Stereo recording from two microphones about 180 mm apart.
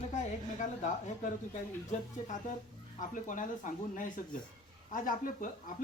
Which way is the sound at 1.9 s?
40° left (ahead or behind).